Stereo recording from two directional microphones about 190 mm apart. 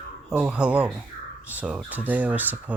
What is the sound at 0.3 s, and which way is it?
Speech, 5° right (ahead or behind).